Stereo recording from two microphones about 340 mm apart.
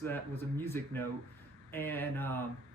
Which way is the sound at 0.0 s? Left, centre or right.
Centre.